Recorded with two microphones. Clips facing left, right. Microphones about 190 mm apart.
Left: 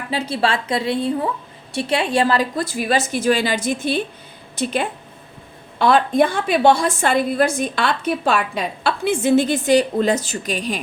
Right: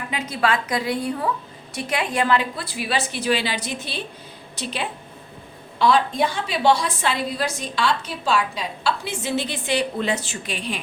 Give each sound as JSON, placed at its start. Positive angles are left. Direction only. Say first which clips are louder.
{"t": 0.1, "sound": "a woman's voice", "louder": "left 3 dB", "side_deg": 30}